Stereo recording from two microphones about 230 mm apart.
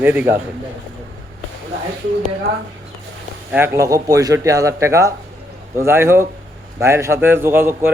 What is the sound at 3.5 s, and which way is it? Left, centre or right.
A man's voice, centre.